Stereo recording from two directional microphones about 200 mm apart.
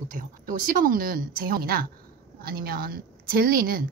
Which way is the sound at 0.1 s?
45° right (ahead or behind).